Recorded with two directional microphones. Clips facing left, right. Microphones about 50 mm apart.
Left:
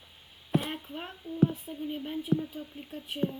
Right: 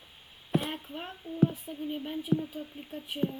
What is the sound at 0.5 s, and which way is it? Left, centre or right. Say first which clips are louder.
Speech: left 1 dB; centre.